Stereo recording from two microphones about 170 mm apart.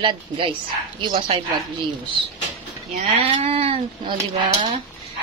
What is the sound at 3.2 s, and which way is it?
Speech, 35° right (ahead or behind).